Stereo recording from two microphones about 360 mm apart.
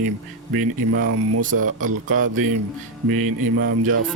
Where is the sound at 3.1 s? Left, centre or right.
Right.